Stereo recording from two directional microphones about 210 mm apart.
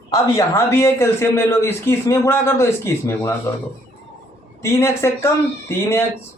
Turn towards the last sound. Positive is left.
turn(degrees=10)  # may be behind; listen again after turning